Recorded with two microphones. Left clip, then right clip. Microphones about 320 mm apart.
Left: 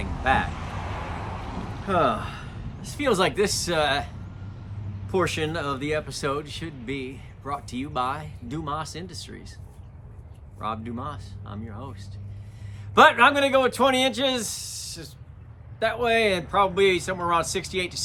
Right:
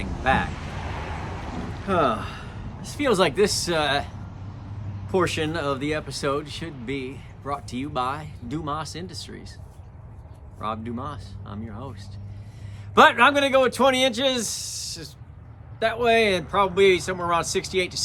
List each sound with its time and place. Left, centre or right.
0.0 s speech: centre
0.6 s a sound: centre
1.9 s speech: centre
10.6 s speech: centre